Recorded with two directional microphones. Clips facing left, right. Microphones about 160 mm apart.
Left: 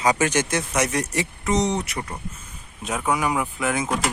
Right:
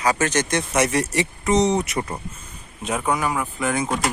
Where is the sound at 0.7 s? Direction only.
Centre (ahead or behind).